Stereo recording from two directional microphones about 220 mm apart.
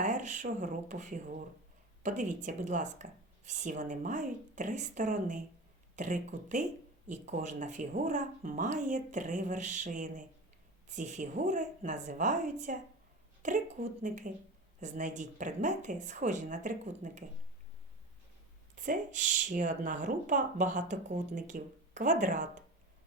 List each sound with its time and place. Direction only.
0.0 s speech: 35° right (ahead or behind)
18.8 s speech: 35° right (ahead or behind)